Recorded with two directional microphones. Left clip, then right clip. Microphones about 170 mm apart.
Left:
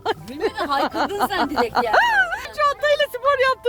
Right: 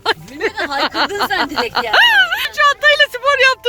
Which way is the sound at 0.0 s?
20° left (ahead or behind).